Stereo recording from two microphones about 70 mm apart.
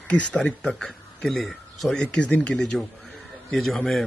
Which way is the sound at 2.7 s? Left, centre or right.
Centre.